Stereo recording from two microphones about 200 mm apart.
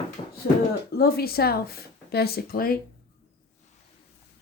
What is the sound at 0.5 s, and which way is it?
Speech, 45° left (ahead or behind).